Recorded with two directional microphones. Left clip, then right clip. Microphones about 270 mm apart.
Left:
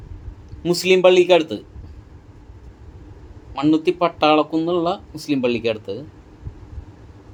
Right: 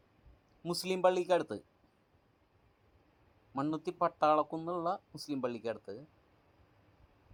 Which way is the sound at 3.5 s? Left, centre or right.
Right.